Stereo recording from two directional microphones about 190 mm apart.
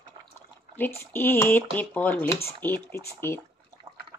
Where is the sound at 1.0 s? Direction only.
15° left (ahead or behind).